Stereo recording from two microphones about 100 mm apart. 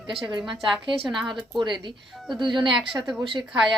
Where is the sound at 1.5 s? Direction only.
55° right (ahead or behind).